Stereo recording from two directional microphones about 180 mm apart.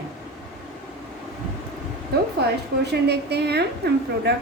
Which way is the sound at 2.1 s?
65° right (ahead or behind).